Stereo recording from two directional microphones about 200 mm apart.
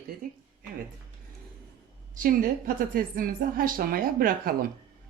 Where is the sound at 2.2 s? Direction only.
45° right (ahead or behind).